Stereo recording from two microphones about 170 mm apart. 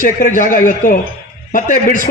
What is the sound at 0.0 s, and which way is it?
A man's voice, 50° left (ahead or behind).